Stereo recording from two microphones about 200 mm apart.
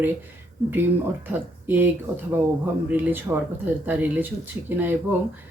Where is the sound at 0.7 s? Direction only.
10° right (ahead or behind).